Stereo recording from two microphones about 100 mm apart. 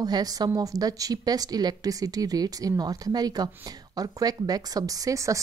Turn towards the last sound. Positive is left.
turn(degrees=-35)  # may be behind; listen again after turning